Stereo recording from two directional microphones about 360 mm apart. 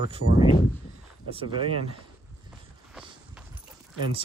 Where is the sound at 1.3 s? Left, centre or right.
Centre.